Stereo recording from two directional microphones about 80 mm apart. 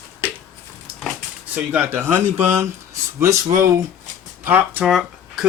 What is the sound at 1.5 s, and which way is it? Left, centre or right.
Speech, right.